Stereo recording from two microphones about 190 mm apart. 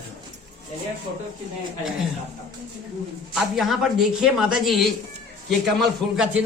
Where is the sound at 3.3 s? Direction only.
Centre (ahead or behind).